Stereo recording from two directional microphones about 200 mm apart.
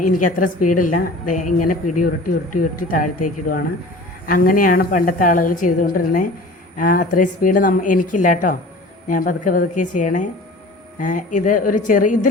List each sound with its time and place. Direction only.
0.2 s a woman's voice: 40° left (ahead or behind)